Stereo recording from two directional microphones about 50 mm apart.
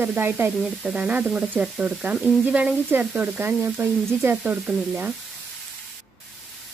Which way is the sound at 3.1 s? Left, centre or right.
Right.